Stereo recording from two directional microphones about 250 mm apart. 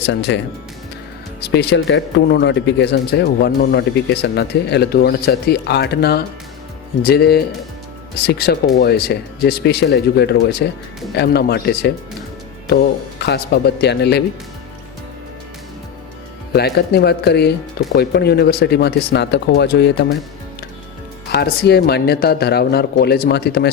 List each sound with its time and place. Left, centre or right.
0.1 s speech: left
1.4 s speech: left
13.1 s speech: left
16.5 s speech: left
21.3 s speech: left